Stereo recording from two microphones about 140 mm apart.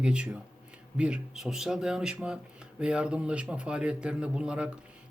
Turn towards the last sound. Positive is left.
turn(degrees=-5)  # may be behind; listen again after turning